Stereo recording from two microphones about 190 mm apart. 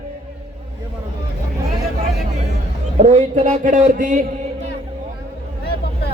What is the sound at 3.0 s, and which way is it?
A man's voice, 35° right (ahead or behind).